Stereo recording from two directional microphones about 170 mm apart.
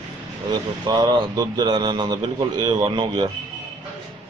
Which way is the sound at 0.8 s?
25° right (ahead or behind).